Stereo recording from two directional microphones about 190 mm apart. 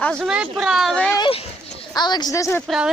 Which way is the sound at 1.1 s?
25° left (ahead or behind).